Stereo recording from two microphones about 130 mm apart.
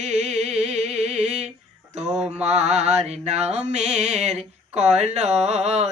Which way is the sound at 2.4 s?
60° right (ahead or behind).